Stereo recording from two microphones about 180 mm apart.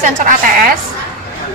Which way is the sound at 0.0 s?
45° right (ahead or behind).